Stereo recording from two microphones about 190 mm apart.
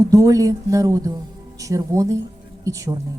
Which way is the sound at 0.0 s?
15° right (ahead or behind).